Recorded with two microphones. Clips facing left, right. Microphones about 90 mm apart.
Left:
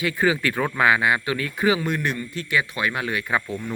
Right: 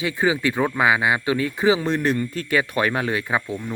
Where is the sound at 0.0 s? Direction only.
20° right (ahead or behind).